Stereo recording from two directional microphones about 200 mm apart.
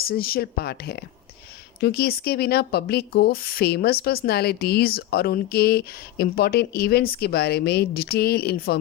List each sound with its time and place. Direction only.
0.0 s speech: 50° left (ahead or behind)